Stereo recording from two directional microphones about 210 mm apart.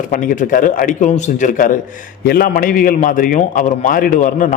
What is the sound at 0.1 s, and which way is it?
A man's voice, 40° left (ahead or behind).